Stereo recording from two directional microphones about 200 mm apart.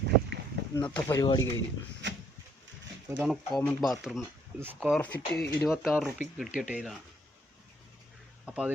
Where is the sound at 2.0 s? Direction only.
65° right (ahead or behind).